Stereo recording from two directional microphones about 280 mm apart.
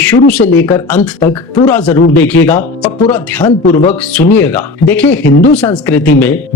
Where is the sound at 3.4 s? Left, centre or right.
Left.